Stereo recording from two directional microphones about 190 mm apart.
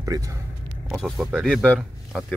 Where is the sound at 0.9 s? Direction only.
Centre (ahead or behind).